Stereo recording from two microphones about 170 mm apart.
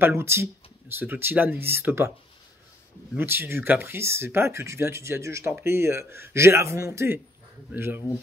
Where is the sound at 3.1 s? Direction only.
15° right (ahead or behind).